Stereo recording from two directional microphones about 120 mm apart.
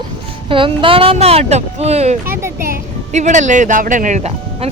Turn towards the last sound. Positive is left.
turn(degrees=-75)  # may be behind; listen again after turning